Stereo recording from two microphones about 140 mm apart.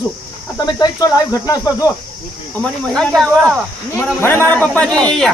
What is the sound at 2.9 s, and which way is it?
Speech, 5° left (ahead or behind).